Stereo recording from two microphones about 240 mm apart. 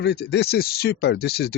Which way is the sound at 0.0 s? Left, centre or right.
Left.